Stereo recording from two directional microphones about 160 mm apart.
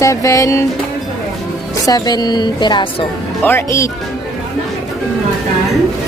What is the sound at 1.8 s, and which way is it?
A woman's voice, 25° left (ahead or behind).